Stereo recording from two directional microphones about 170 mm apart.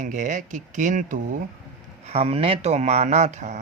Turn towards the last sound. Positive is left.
turn(degrees=-40)  # may be behind; listen again after turning